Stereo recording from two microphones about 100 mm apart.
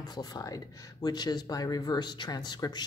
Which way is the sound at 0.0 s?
40° left (ahead or behind).